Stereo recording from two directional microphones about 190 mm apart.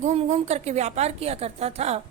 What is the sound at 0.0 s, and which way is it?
A woman's voice, 35° right (ahead or behind).